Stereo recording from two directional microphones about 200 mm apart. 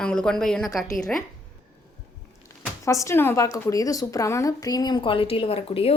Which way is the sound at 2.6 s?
15° left (ahead or behind).